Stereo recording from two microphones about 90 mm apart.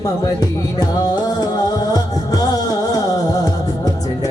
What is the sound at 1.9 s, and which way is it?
Music, 45° left (ahead or behind).